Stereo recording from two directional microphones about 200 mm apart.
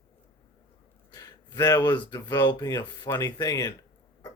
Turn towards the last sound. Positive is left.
turn(degrees=20)  # may be behind; listen again after turning